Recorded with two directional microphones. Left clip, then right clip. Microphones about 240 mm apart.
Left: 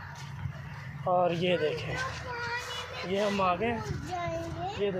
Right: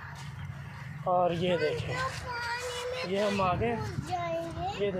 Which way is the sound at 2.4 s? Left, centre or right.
Right.